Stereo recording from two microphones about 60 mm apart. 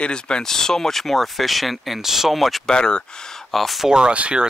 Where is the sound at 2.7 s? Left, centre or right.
Centre.